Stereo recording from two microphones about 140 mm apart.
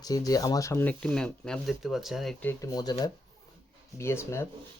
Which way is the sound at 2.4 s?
15° left (ahead or behind).